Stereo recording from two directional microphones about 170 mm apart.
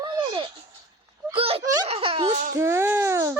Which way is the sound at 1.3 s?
35° right (ahead or behind).